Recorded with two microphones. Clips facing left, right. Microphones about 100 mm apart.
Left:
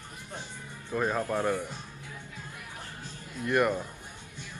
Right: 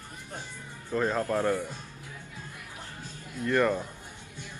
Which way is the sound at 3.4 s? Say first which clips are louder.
Right 1 dB; 15° left (ahead or behind).